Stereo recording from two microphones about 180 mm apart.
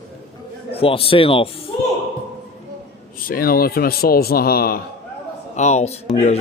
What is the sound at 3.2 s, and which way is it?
Speech, 55° left (ahead or behind).